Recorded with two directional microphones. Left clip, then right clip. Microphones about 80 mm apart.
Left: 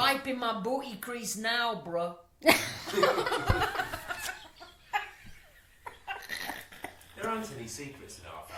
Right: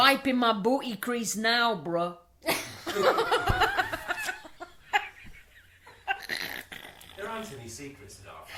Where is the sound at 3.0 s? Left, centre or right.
Right.